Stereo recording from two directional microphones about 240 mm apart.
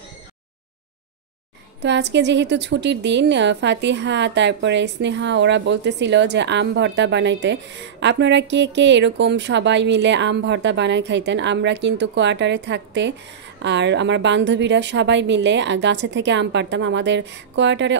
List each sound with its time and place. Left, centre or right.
1.8 s a woman's voice: right